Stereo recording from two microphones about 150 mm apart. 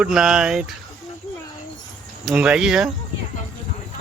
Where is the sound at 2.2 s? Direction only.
5° right (ahead or behind).